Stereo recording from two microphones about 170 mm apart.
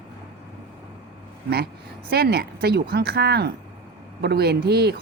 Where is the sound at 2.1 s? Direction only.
70° right (ahead or behind).